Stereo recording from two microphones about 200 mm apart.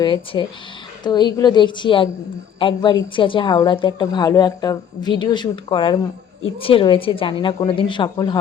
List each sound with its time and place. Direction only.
0.0 s a woman's voice: 25° left (ahead or behind)